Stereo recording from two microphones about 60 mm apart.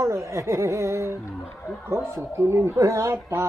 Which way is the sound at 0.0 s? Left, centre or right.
Right.